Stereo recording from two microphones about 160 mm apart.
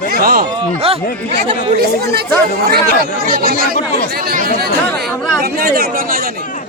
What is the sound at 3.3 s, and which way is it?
Speech, 65° right (ahead or behind).